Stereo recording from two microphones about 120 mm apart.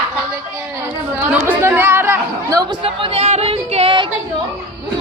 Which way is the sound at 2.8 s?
50° right (ahead or behind).